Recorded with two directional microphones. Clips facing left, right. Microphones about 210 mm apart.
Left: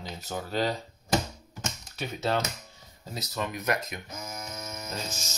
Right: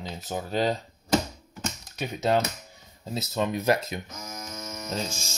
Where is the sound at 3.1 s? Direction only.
25° right (ahead or behind).